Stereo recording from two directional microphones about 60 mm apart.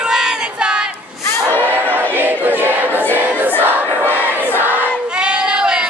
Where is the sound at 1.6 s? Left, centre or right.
Right.